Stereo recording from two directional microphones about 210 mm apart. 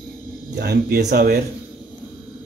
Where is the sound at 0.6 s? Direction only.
50° right (ahead or behind).